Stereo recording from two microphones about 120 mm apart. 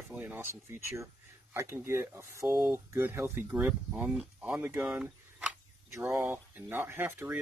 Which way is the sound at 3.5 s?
10° right (ahead or behind).